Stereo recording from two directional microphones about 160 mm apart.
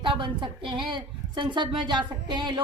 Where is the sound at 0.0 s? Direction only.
30° right (ahead or behind).